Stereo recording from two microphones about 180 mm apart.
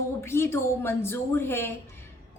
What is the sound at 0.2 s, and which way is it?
A woman's voice, 15° left (ahead or behind).